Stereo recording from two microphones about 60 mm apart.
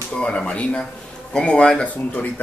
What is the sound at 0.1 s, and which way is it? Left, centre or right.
Speech, centre.